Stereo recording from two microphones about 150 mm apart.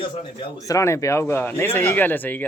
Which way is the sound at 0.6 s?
20° left (ahead or behind).